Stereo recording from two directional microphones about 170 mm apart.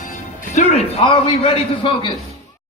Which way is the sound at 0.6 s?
35° left (ahead or behind).